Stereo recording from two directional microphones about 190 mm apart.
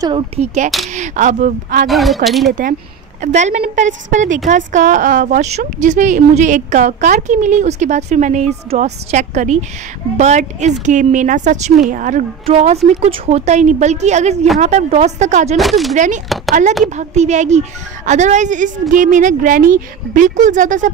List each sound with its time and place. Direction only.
0.0 s speech: 25° right (ahead or behind)
0.9 s speech: 40° right (ahead or behind)
1.9 s a woman's voice: centre (ahead or behind)
3.2 s a woman's voice: 35° right (ahead or behind)
12.4 s speech: 35° right (ahead or behind)
15.5 s a woman's voice: centre (ahead or behind)
15.9 s speech: 40° right (ahead or behind)